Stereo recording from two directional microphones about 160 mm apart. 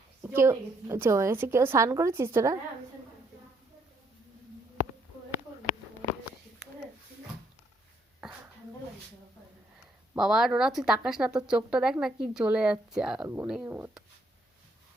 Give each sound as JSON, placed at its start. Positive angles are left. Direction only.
{"t": 0.2, "sound": "a woman's voice", "side_deg": -15}
{"t": 10.2, "sound": "a woman's voice", "side_deg": -5}